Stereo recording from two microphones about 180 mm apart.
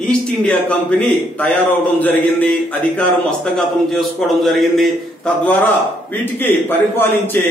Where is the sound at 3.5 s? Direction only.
Centre (ahead or behind).